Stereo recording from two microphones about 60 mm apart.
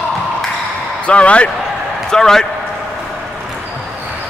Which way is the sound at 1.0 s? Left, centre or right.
Left.